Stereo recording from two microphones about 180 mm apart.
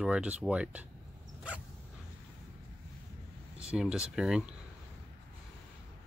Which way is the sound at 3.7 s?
5° right (ahead or behind).